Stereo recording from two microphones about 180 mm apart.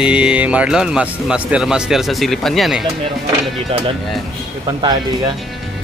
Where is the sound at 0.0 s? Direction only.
5° right (ahead or behind).